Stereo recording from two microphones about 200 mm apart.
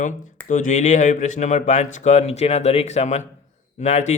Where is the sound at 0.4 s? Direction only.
40° left (ahead or behind).